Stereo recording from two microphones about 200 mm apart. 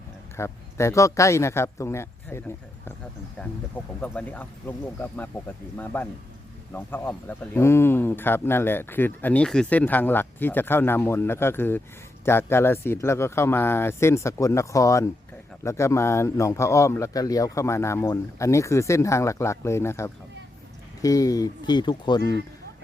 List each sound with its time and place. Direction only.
0.3 s speech: 15° left (ahead or behind)
4.0 s speech: 5° left (ahead or behind)